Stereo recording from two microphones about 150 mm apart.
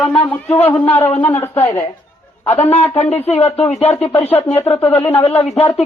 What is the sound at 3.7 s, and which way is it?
Speech, 45° left (ahead or behind).